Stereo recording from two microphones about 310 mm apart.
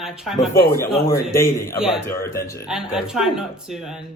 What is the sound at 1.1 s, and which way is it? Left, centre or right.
Speech, centre.